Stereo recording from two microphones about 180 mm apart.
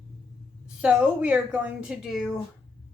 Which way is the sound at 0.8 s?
5° right (ahead or behind).